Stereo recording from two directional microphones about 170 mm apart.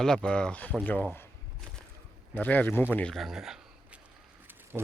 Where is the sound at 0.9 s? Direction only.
10° left (ahead or behind).